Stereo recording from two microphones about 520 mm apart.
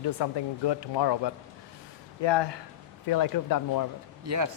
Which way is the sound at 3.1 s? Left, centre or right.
Left.